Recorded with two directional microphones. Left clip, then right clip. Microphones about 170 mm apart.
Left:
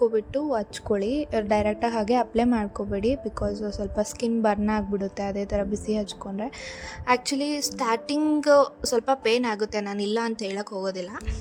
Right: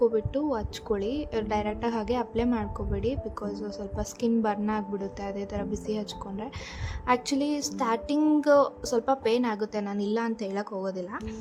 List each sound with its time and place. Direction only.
0.0 s a woman's voice: 30° left (ahead or behind); by 11.0 s 55° left (ahead or behind)